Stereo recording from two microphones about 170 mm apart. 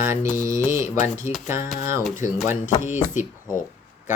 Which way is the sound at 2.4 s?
45° left (ahead or behind).